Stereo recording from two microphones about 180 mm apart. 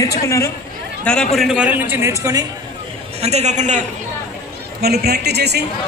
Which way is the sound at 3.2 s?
35° right (ahead or behind).